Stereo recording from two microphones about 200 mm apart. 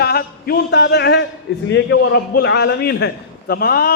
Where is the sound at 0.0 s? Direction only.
50° left (ahead or behind).